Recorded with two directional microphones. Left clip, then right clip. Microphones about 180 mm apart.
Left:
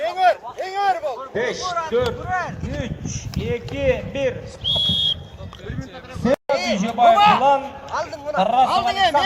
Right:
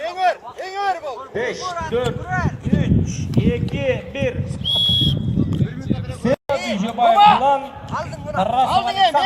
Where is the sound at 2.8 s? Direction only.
35° right (ahead or behind).